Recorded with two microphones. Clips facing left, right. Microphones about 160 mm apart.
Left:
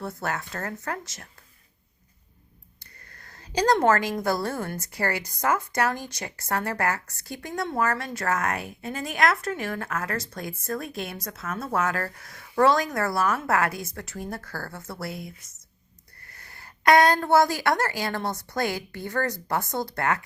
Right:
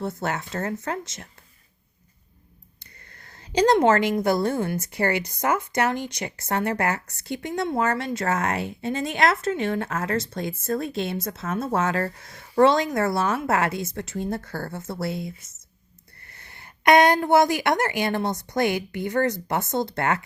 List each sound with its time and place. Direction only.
0.0 s a woman's voice: 25° right (ahead or behind)
3.1 s a sound: 25° right (ahead or behind)
4.2 s a woman's voice: 20° right (ahead or behind)